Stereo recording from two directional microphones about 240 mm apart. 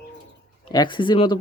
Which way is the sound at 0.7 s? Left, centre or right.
Centre.